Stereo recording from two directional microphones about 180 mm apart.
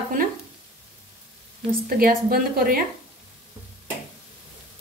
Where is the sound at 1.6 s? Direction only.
55° right (ahead or behind).